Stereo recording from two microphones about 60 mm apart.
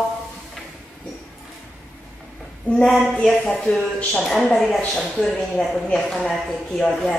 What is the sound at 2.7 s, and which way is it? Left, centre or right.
Speech, centre.